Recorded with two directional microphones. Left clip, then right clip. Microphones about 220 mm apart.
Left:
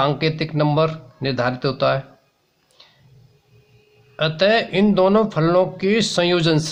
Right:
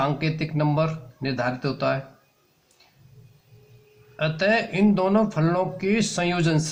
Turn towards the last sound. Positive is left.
turn(degrees=40)  # may be behind; listen again after turning